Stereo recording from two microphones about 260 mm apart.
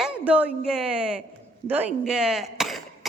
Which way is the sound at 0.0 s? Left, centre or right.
Centre.